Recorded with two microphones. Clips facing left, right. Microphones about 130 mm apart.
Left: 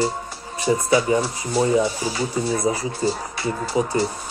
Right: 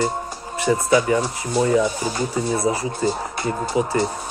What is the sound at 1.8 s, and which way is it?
Speech, 50° right (ahead or behind).